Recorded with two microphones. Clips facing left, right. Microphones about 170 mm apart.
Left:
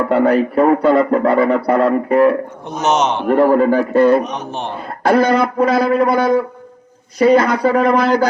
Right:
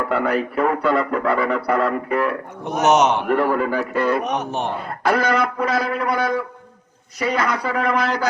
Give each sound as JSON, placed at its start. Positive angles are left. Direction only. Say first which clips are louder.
{"t": 0.1, "sound": "speech", "louder": "left 9 dB", "side_deg": 35}
{"t": 2.8, "sound": "a man's voice", "louder": "even", "side_deg": -15}
{"t": 3.2, "sound": "speech", "louder": "left 7 dB", "side_deg": 35}